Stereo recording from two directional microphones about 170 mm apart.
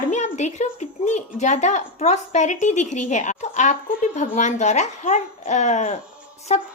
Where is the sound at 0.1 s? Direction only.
45° left (ahead or behind).